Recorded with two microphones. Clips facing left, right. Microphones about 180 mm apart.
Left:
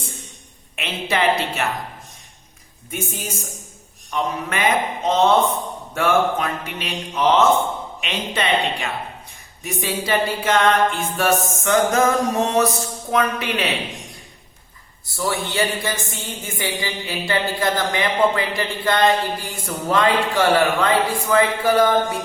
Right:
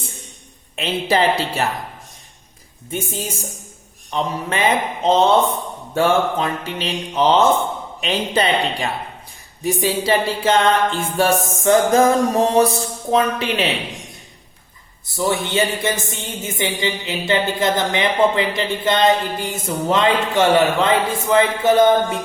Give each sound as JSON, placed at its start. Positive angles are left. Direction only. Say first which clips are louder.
{"t": 0.8, "sound": "music", "louder": "right 4 dB", "side_deg": -30}
{"t": 2.9, "sound": "a woman's voice", "louder": "right 3 dB", "side_deg": -30}
{"t": 8.0, "sound": "music", "louder": "right 5 dB", "side_deg": -35}
{"t": 15.1, "sound": "a woman's voice", "louder": "right 4 dB", "side_deg": -20}